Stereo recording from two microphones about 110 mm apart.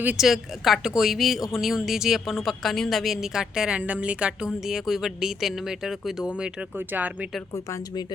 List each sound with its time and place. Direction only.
0.2 s a woman's voice: centre (ahead or behind)
7.5 s speech: 30° left (ahead or behind)